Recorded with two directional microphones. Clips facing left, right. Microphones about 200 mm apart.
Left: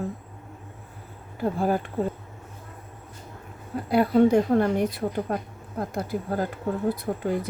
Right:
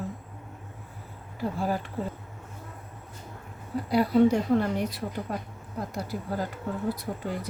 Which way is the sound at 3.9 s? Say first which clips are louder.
Left 3 dB; 55° left (ahead or behind).